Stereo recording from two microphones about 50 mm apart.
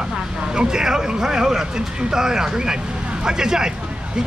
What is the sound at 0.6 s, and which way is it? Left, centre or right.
Speech, centre.